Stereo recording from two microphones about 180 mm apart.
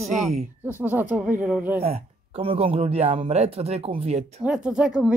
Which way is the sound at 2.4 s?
30° right (ahead or behind).